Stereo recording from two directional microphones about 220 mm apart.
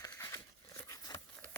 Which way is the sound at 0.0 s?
15° left (ahead or behind).